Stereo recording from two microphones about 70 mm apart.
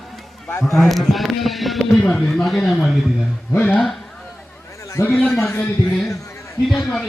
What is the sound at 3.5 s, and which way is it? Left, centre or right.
Speech, left.